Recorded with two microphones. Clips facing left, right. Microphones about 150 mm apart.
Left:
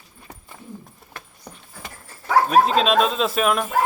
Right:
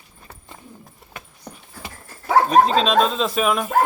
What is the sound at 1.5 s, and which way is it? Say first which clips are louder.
Horse: right 3 dB; centre (ahead or behind).